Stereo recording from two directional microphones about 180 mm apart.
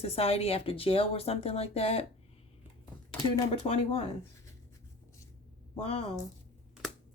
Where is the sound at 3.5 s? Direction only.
30° left (ahead or behind).